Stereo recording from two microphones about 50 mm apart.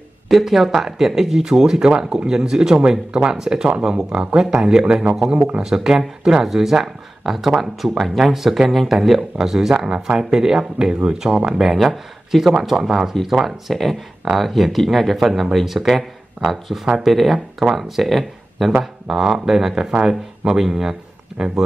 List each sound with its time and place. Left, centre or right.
0.3 s speech: centre